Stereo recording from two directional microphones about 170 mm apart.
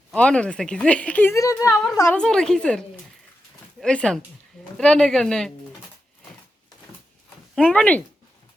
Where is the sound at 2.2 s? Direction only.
5° left (ahead or behind).